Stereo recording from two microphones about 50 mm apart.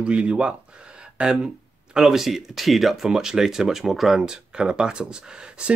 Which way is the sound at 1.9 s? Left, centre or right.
Centre.